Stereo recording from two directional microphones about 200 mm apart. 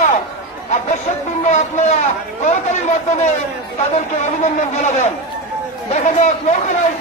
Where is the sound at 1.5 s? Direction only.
35° left (ahead or behind).